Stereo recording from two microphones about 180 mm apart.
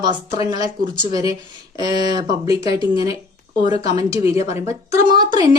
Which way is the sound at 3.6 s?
25° right (ahead or behind).